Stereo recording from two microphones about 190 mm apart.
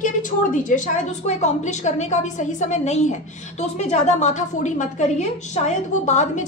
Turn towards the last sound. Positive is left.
turn(degrees=40)  # may be behind; listen again after turning